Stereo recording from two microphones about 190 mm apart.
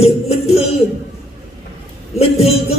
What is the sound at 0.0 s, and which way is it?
Music, 35° left (ahead or behind).